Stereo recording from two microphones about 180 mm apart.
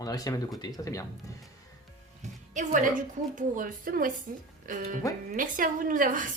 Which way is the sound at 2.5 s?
40° right (ahead or behind).